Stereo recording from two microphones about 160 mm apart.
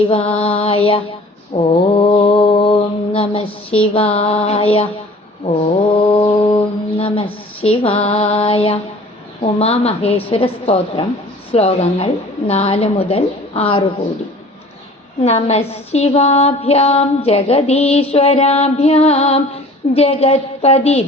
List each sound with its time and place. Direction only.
0.3 s mantra: 35° left (ahead or behind)
9.4 s a woman's voice: 40° left (ahead or behind)
15.2 s a woman's voice: 40° left (ahead or behind)